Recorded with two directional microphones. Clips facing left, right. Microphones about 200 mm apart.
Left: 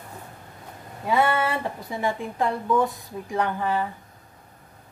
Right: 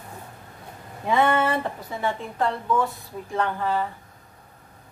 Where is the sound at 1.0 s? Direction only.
10° left (ahead or behind).